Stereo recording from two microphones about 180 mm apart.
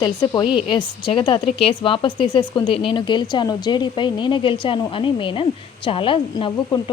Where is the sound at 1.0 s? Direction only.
25° left (ahead or behind).